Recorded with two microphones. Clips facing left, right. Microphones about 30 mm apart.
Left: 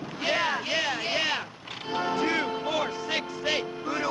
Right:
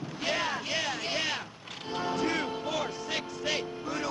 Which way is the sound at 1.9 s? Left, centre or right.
Centre.